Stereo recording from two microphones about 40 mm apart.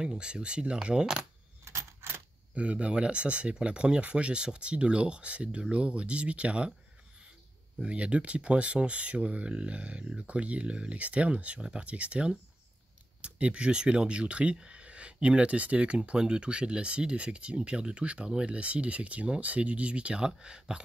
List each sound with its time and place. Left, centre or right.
0.0 s speech: right
2.0 s a sound: right
2.5 s speech: right
7.8 s speech: right
20.2 s speech: centre